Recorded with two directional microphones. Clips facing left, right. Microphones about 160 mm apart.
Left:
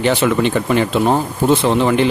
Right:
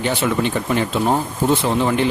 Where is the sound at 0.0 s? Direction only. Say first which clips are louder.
Left 5 dB; 90° left.